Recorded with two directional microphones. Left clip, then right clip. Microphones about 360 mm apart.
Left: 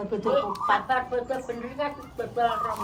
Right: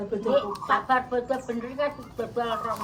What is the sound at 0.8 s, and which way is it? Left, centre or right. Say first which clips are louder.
Speech: right 2 dB; right.